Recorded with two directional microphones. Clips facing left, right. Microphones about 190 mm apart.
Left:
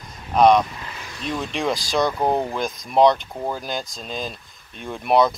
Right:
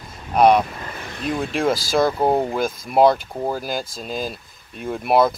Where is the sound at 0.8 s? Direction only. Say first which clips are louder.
Right 4 dB; 55° right (ahead or behind).